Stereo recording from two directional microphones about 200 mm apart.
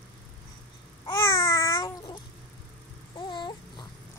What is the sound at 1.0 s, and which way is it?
Babbling, 15° left (ahead or behind).